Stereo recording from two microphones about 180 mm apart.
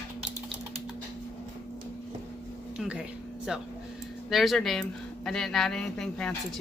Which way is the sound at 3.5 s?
Centre (ahead or behind).